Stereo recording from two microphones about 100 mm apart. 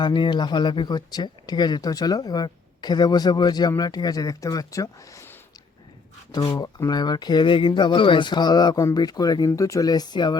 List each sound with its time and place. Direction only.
0.0 s speech: 50° left (ahead or behind); by 5.3 s 35° left (ahead or behind)
6.3 s speech: 40° left (ahead or behind)